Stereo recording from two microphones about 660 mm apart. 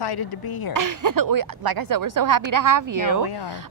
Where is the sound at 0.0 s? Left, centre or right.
Left.